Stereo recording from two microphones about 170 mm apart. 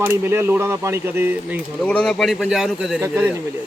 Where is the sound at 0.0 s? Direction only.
15° right (ahead or behind).